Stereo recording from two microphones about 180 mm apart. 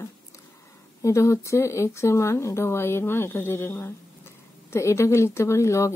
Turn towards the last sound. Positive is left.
turn(degrees=15)  # may be behind; listen again after turning